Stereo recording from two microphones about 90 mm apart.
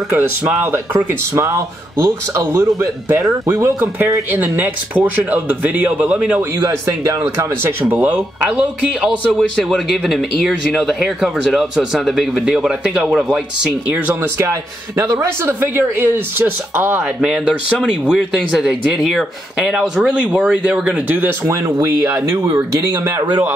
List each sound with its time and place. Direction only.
0.1 s a man's voice: 25° right (ahead or behind)
7.9 s speech: 15° right (ahead or behind)
9.0 s speech: centre (ahead or behind); by 14.1 s 15° right (ahead or behind)
14.4 s a man's voice: 40° right (ahead or behind)
17.2 s speech: 5° right (ahead or behind)
21.1 s a man's voice: 20° right (ahead or behind)
21.7 s a man's voice: 35° right (ahead or behind)